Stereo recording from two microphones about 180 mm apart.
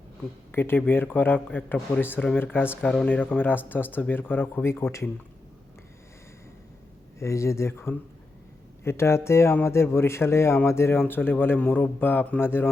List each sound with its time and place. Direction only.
0.5 s speech: 10° left (ahead or behind)
7.2 s speech: 15° left (ahead or behind)